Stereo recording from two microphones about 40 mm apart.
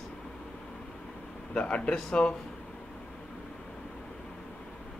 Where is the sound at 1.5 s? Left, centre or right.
Left.